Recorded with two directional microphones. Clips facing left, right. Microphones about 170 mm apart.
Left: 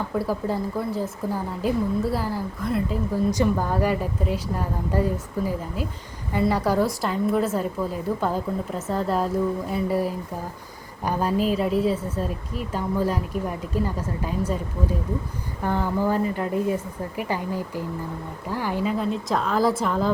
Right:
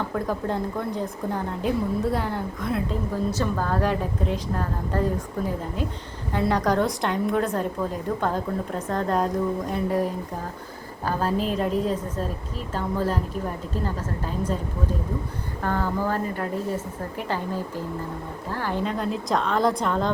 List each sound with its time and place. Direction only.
0.1 s a woman's voice: 5° left (ahead or behind)
3.2 s a woman's voice: 15° left (ahead or behind)
15.6 s a woman's voice: 15° left (ahead or behind)